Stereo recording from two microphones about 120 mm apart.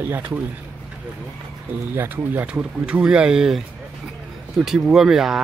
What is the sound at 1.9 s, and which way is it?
Speech, 15° right (ahead or behind).